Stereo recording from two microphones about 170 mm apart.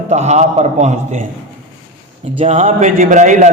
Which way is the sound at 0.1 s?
40° right (ahead or behind).